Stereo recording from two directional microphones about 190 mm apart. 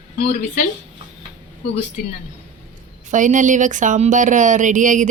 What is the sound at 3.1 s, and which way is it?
Speech, 40° right (ahead or behind).